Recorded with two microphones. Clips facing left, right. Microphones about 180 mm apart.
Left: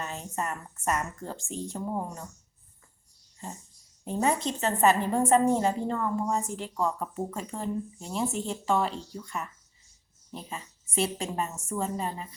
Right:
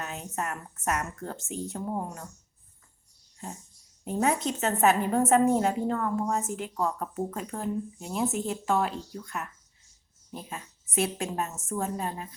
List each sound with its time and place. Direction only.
0.0 s speech: 5° right (ahead or behind)
4.0 s speech: 5° right (ahead or behind)